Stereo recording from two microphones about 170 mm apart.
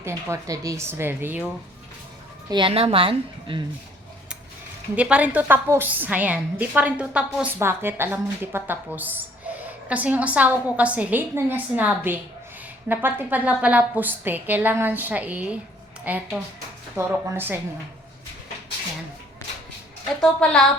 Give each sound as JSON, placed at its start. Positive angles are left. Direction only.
{"t": 0.3, "sound": "a woman's voice", "side_deg": -20}
{"t": 2.5, "sound": "a woman's voice", "side_deg": -30}
{"t": 4.9, "sound": "a woman's voice", "side_deg": -5}
{"t": 20.2, "sound": "a woman's voice", "side_deg": 5}